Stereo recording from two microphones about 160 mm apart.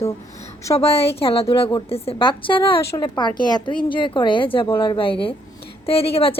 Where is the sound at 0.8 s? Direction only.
40° left (ahead or behind).